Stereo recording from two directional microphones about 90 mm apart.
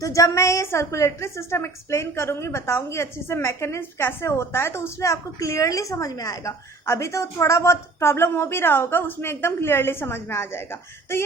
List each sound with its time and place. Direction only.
0.0 s a woman's voice: 35° left (ahead or behind)